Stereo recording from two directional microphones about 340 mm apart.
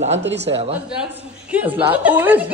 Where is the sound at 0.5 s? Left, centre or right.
Centre.